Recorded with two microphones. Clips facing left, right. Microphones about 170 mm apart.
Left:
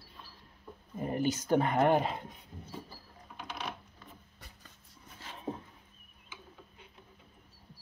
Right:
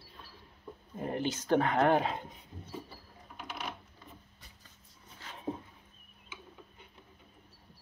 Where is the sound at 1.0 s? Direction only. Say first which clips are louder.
Left 2 dB; 5° left (ahead or behind).